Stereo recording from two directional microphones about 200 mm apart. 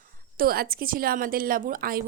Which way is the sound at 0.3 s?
50° right (ahead or behind).